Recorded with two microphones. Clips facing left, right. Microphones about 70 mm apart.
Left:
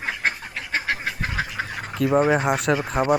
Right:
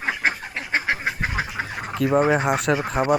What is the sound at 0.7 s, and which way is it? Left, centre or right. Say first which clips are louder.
Duck: right 2 dB; right.